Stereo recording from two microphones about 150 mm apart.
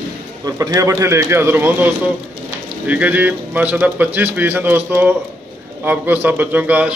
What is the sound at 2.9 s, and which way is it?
Speech, 10° right (ahead or behind).